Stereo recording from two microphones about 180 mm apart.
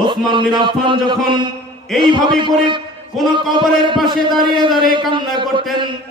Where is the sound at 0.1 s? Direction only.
25° right (ahead or behind).